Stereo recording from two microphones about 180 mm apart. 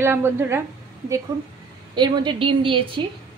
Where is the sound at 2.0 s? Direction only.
25° right (ahead or behind).